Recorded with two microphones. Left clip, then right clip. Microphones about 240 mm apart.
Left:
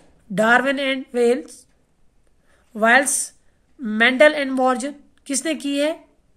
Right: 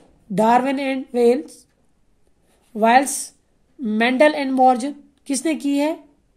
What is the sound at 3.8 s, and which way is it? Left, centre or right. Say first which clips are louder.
A woman's voice: left 2 dB; left.